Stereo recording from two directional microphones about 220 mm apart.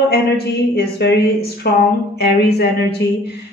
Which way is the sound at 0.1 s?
50° left (ahead or behind).